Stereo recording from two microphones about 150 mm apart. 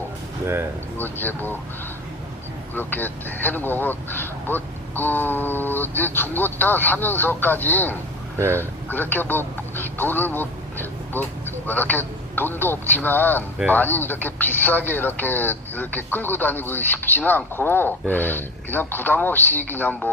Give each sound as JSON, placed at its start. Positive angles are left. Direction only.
{"t": 0.4, "sound": "speech", "side_deg": -15}
{"t": 0.9, "sound": "speech", "side_deg": 15}
{"t": 2.7, "sound": "speech", "side_deg": 10}